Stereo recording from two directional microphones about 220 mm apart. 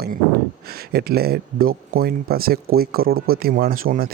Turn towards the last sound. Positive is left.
turn(degrees=-40)  # may be behind; listen again after turning